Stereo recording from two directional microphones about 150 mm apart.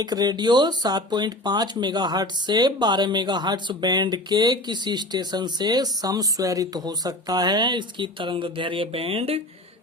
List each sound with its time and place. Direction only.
0.0 s speech: 25° right (ahead or behind)